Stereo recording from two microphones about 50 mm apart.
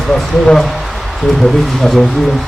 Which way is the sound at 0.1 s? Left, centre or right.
Centre.